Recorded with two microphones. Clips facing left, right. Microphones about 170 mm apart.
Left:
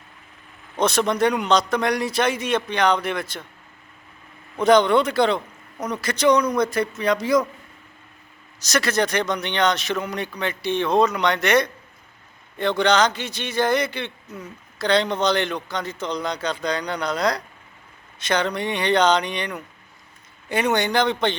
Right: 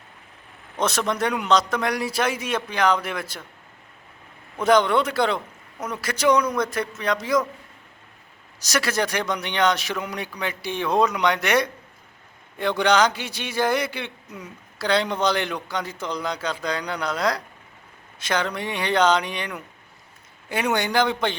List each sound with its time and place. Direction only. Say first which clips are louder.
0.8 s a man's voice: left 4 dB; centre (ahead or behind)
4.6 s a man's voice: left 3 dB; 5° right (ahead or behind)
8.6 s a man's voice: left 2 dB; 10° right (ahead or behind)